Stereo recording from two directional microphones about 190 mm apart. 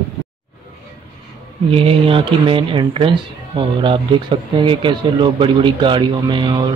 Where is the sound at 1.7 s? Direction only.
30° right (ahead or behind).